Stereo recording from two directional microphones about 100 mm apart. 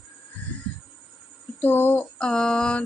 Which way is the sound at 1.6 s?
20° left (ahead or behind).